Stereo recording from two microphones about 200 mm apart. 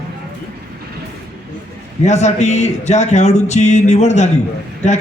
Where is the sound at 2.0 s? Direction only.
35° left (ahead or behind).